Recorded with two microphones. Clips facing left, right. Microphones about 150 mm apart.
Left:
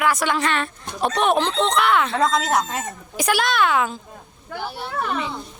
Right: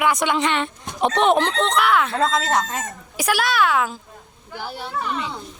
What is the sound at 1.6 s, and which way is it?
Speech, centre (ahead or behind).